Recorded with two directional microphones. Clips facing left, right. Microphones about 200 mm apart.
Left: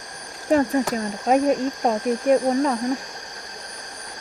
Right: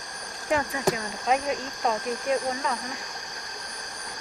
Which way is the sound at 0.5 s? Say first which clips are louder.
Left 7 dB; 40° left (ahead or behind).